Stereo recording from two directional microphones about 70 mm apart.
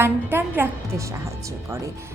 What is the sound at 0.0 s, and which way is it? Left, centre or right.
Speech, right.